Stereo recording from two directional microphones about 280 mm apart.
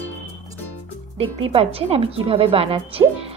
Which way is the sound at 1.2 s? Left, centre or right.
Centre.